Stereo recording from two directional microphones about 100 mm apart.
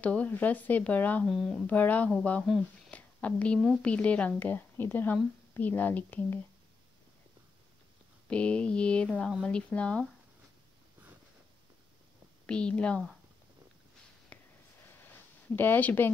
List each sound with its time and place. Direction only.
0.0 s speech: 15° left (ahead or behind)
1.2 s speech: centre (ahead or behind)
1.7 s speech: 15° left (ahead or behind)
8.3 s speech: 10° left (ahead or behind)
12.4 s speech: 10° left (ahead or behind)
14.3 s a sound: 15° left (ahead or behind)
15.5 s speech: 20° left (ahead or behind)